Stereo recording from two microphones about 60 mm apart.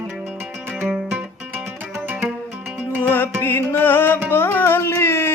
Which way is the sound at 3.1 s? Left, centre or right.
Left.